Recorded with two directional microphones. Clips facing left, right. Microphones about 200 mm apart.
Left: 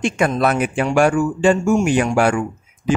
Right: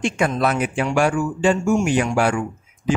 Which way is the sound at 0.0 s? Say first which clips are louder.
Left 2 dB; 55° left (ahead or behind).